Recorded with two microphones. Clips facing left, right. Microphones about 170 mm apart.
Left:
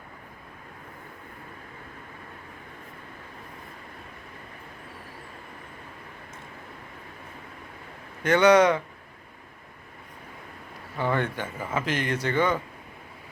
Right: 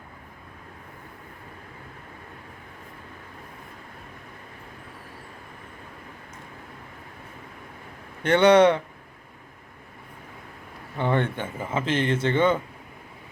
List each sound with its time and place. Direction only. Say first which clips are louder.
8.3 s speech: right 2 dB; 30° right (ahead or behind)
10.9 s speech: right 2 dB; 25° right (ahead or behind)